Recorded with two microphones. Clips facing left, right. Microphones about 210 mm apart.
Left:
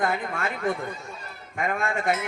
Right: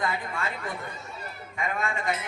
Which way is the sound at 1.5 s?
50° left (ahead or behind).